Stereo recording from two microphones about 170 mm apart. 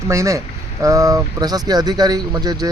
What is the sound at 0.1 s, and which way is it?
Speech, 20° right (ahead or behind).